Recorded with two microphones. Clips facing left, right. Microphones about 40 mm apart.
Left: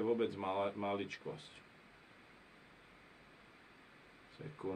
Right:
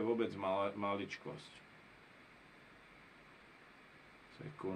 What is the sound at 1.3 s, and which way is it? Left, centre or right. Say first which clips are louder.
Speech: left 2 dB; right.